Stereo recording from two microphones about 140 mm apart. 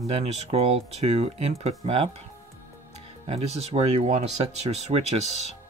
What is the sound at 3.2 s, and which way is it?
Speech, 45° right (ahead or behind).